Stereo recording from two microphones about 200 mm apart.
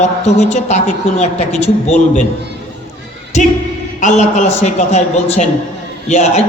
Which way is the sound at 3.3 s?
35° left (ahead or behind).